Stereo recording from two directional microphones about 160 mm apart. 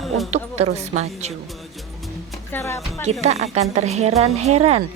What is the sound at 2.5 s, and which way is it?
Speech, 15° left (ahead or behind).